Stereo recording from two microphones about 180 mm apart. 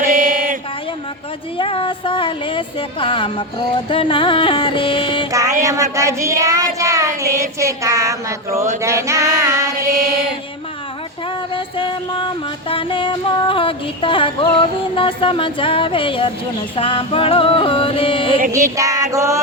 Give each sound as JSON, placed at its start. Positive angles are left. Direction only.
{"t": 0.0, "sound": "mantra", "side_deg": -50}
{"t": 1.5, "sound": "speech", "side_deg": 30}
{"t": 5.3, "sound": "a sound", "side_deg": -20}
{"t": 5.6, "sound": "child singing", "side_deg": -15}
{"t": 11.5, "sound": "music", "side_deg": 30}
{"t": 18.5, "sound": "child singing", "side_deg": -15}